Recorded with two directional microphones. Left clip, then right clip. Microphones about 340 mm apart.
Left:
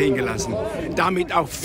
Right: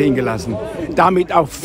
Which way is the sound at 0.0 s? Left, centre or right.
Centre.